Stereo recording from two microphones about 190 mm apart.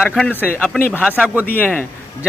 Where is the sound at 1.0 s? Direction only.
5° right (ahead or behind).